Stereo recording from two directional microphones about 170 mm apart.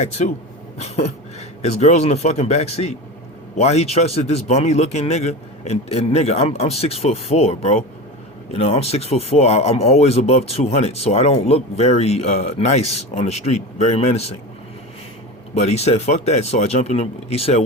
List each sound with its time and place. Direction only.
0.2 s speech: 50° left (ahead or behind)
15.5 s speech: 40° left (ahead or behind)